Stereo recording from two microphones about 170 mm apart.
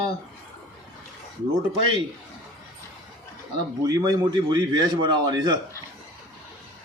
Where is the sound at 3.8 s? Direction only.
25° right (ahead or behind).